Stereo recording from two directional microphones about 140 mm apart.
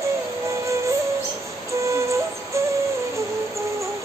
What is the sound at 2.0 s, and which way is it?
Music, 20° right (ahead or behind).